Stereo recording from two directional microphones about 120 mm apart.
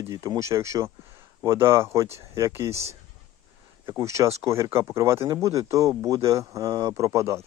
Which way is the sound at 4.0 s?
25° right (ahead or behind).